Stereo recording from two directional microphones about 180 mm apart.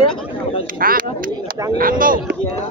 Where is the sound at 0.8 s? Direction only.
55° right (ahead or behind).